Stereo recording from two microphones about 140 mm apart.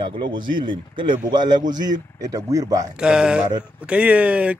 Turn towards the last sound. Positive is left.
turn(degrees=-10)  # may be behind; listen again after turning